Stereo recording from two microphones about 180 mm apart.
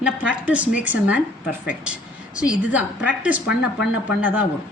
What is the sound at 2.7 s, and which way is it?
A woman's voice, 5° right (ahead or behind).